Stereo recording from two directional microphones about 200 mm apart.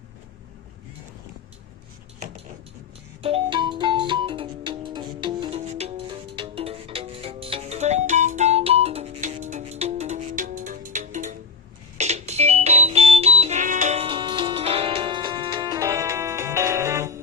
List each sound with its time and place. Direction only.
2.1 s dishes: 35° right (ahead or behind)
3.2 s music: 25° right (ahead or behind)